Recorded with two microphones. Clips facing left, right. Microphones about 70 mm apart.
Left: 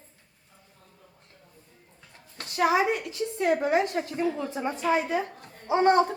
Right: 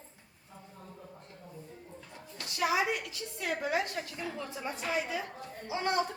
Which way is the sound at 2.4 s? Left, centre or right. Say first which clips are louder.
Left 7 dB; left.